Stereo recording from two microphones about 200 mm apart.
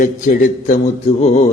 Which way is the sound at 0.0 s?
40° left (ahead or behind).